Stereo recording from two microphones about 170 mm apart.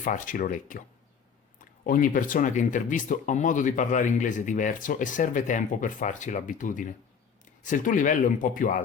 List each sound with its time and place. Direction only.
0.0 s speech: 50° left (ahead or behind)